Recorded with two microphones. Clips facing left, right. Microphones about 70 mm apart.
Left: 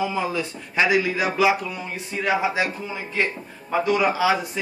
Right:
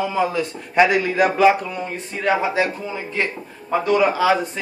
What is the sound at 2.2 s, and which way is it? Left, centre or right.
Speech, centre.